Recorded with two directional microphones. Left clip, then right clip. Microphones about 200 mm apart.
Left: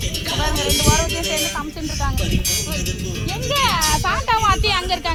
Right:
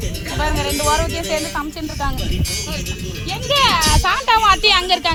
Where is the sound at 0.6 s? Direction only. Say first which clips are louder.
Right 1 dB; 50° right (ahead or behind).